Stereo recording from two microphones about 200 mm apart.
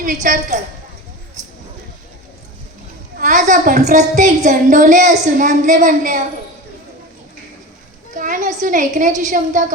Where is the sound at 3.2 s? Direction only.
40° right (ahead or behind).